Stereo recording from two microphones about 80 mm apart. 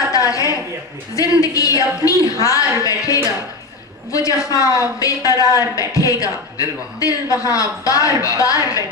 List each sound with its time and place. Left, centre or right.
0.1 s a sound: left
1.1 s speech: left
4.1 s speech: left